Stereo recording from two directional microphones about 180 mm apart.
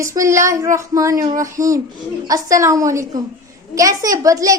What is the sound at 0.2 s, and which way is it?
A woman's voice, 15° right (ahead or behind).